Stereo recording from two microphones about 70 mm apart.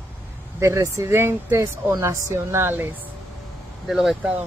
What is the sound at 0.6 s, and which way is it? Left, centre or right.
Speech, right.